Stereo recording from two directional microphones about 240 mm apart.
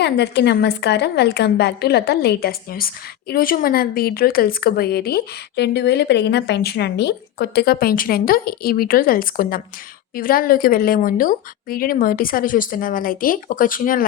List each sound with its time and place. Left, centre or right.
0.0 s a woman's voice: left